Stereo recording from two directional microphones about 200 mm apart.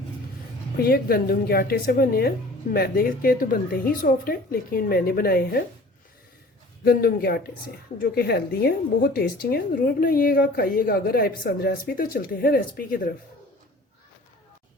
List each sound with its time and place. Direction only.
0.8 s a woman's voice: 50° left (ahead or behind)
6.8 s a woman's voice: 50° left (ahead or behind)